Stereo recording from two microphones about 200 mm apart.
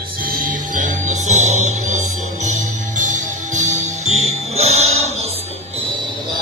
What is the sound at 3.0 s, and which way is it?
Music, 40° right (ahead or behind).